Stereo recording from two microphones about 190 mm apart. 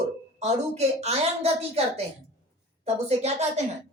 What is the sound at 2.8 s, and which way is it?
Speech, 35° right (ahead or behind).